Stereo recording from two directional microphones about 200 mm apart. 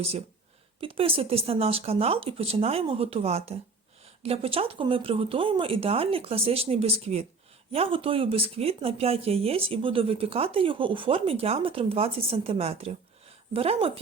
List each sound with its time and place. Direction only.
0.8 s speech: 25° right (ahead or behind)